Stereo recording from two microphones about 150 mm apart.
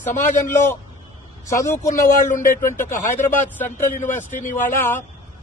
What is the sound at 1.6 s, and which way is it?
Speech, 20° left (ahead or behind).